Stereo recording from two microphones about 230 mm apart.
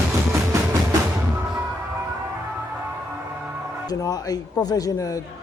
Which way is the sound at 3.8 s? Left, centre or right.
Centre.